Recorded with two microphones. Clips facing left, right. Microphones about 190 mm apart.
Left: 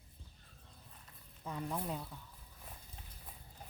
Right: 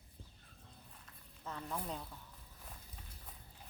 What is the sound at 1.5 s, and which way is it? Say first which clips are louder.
Speech: left 3 dB; 10° left (ahead or behind).